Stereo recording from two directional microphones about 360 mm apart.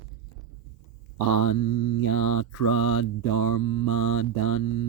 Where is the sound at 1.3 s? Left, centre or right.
Left.